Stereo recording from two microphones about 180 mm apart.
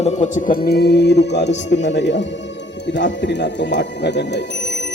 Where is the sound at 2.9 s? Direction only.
75° left (ahead or behind).